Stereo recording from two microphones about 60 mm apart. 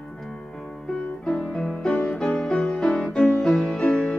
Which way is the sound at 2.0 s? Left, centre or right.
Centre.